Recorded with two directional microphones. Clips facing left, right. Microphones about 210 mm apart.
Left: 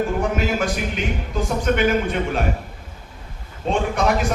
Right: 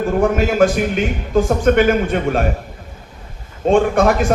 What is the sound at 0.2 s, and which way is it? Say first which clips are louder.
A man's voice: right 8 dB; 50° right (ahead or behind).